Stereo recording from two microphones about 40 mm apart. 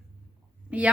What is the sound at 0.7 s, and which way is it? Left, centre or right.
Speech, right.